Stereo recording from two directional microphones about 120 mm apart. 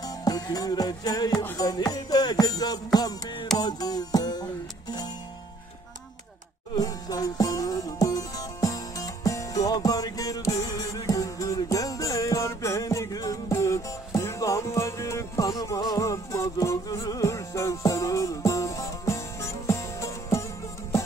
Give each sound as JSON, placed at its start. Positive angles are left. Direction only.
{"t": 0.0, "sound": "music", "side_deg": 30}
{"t": 6.7, "sound": "music", "side_deg": 35}